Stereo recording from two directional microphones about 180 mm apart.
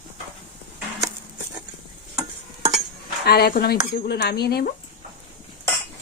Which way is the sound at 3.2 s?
60° left (ahead or behind).